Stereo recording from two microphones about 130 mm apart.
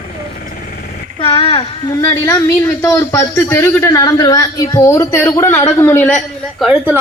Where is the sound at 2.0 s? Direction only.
20° left (ahead or behind).